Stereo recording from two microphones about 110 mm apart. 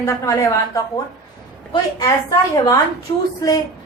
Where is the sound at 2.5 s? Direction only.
30° left (ahead or behind).